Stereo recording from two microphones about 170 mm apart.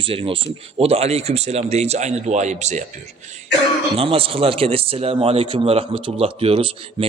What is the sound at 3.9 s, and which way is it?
A man's voice, 35° right (ahead or behind).